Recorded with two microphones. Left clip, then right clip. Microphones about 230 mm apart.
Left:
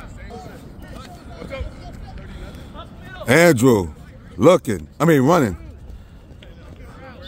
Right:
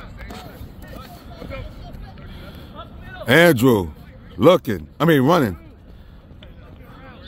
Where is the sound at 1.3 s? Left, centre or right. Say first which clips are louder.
Left 3 dB; left.